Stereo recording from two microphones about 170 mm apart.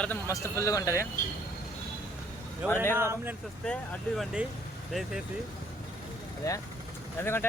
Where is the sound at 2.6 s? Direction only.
10° right (ahead or behind).